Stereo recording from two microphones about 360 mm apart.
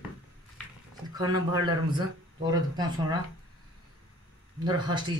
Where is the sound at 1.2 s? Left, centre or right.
Centre.